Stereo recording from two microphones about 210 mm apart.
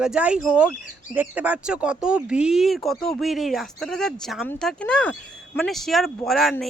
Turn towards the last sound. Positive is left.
turn(degrees=0)  # may be behind; listen again after turning